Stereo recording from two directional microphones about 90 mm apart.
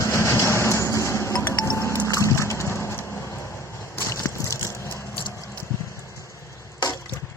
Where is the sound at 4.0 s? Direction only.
30° left (ahead or behind).